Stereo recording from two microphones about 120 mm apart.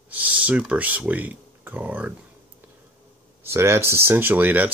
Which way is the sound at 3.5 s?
20° right (ahead or behind).